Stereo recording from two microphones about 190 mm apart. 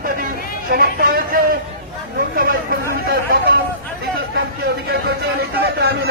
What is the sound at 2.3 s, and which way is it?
Chatter, 50° right (ahead or behind).